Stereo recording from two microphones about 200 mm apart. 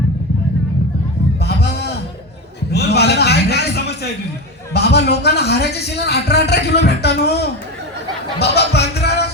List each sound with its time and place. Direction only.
1.4 s a sound: 55° left (ahead or behind)
4.7 s speech: 55° left (ahead or behind)
8.4 s music: 55° left (ahead or behind)